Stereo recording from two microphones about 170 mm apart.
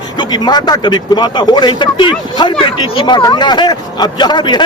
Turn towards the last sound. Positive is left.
turn(degrees=25)  # may be behind; listen again after turning